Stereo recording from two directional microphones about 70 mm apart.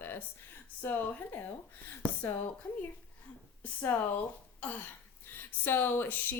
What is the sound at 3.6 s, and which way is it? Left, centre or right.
Speech, left.